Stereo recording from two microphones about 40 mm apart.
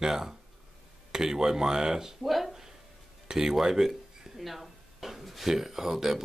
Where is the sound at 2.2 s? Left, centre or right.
Centre.